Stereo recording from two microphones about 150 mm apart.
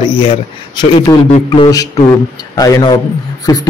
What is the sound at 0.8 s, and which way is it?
A man's voice, 30° left (ahead or behind).